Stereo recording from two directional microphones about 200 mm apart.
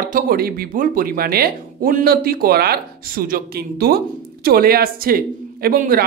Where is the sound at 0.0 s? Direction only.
45° right (ahead or behind).